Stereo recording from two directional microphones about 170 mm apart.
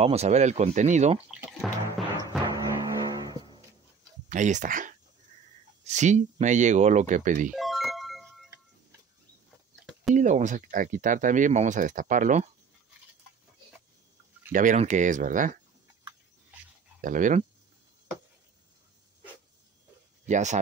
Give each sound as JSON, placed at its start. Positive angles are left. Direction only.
{"t": 0.0, "sound": "speech", "side_deg": -40}
{"t": 1.3, "sound": "music", "side_deg": 0}
{"t": 2.4, "sound": "music", "side_deg": -20}
{"t": 4.3, "sound": "speech", "side_deg": -45}
{"t": 7.5, "sound": "music", "side_deg": 0}
{"t": 10.1, "sound": "speech", "side_deg": -45}
{"t": 14.5, "sound": "speech", "side_deg": -50}
{"t": 17.0, "sound": "speech", "side_deg": -50}
{"t": 20.2, "sound": "speech", "side_deg": -45}